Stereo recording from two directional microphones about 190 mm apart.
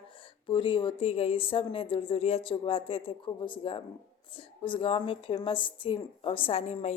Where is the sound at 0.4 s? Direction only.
25° left (ahead or behind).